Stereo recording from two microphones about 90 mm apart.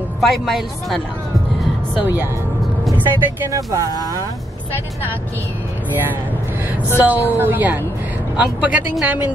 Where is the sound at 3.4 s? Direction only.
35° right (ahead or behind).